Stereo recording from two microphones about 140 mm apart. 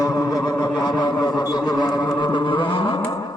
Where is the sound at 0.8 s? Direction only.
30° left (ahead or behind).